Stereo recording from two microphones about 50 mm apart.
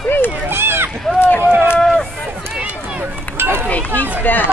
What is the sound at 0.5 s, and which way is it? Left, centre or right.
Run, right.